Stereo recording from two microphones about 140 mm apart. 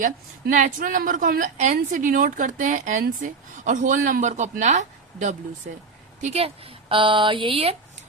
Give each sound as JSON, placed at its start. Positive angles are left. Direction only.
{"t": 0.0, "sound": "a woman's voice", "side_deg": -65}
{"t": 6.2, "sound": "a woman's voice", "side_deg": -45}